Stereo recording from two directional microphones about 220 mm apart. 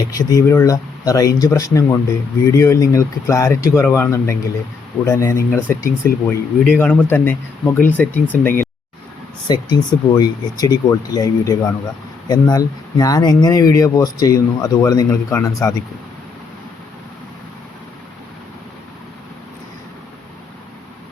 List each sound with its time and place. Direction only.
0.1 s speech: 15° left (ahead or behind)